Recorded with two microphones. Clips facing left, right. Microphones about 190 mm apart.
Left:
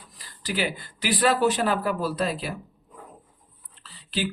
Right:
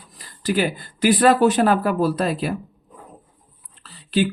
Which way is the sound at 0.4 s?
50° right (ahead or behind).